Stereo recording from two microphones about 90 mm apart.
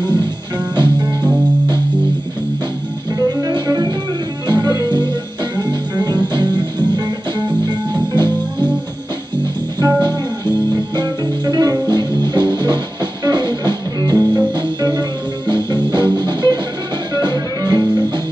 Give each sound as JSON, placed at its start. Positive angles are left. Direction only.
{"t": 0.7, "sound": "music", "side_deg": -55}
{"t": 3.2, "sound": "music", "side_deg": -50}
{"t": 9.8, "sound": "music", "side_deg": -45}